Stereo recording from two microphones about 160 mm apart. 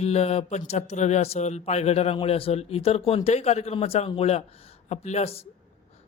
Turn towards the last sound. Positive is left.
turn(degrees=40)  # may be behind; listen again after turning